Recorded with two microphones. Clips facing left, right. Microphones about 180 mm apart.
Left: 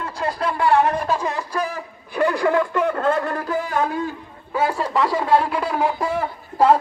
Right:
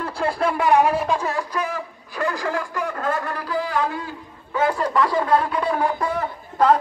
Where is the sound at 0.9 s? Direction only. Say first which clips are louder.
Even; centre (ahead or behind).